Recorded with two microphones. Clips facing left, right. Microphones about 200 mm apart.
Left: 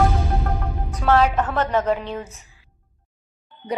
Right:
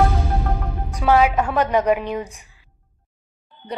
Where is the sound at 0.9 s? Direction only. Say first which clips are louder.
Right 2 dB; 10° right (ahead or behind).